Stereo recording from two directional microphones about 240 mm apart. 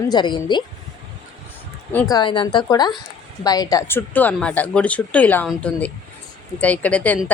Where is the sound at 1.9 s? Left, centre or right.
Centre.